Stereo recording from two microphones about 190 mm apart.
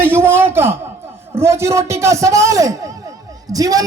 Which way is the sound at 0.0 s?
10° right (ahead or behind).